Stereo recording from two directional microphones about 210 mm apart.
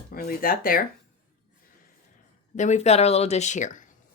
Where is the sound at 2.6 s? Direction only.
35° left (ahead or behind).